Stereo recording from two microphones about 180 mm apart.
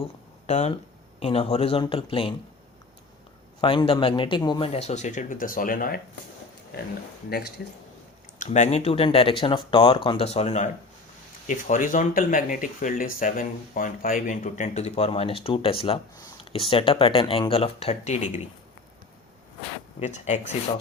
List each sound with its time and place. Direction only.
0.0 s a sound: 40° left (ahead or behind)
1.2 s speech: 35° left (ahead or behind)
3.6 s speech: 30° left (ahead or behind)
4.7 s speech: 35° left (ahead or behind)
7.3 s speech: 65° left (ahead or behind)
8.4 s speech: 40° left (ahead or behind)
20.0 s speech: 40° left (ahead or behind)